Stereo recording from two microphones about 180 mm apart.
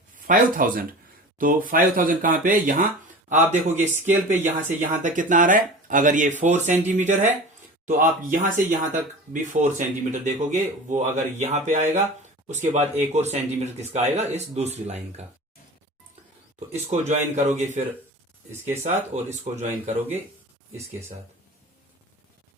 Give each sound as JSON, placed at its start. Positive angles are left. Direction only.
{"t": 0.2, "sound": "speech", "side_deg": -50}
{"t": 16.6, "sound": "speech", "side_deg": -40}
{"t": 18.5, "sound": "speech", "side_deg": -15}
{"t": 18.8, "sound": "speech", "side_deg": -40}